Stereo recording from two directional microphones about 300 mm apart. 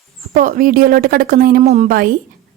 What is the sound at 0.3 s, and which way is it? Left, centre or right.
A woman's voice, right.